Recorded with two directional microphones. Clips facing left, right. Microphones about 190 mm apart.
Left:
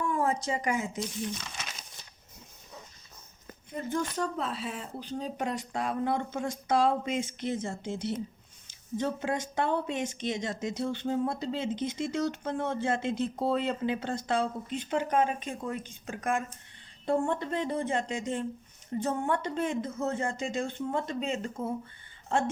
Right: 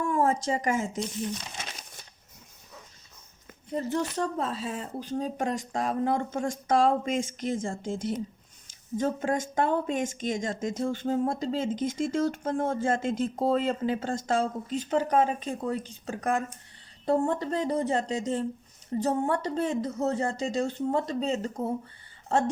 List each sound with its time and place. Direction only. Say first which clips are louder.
0.0 s a woman's voice: right 3 dB; 45° right (ahead or behind)
3.7 s speech: right 3 dB; 35° right (ahead or behind)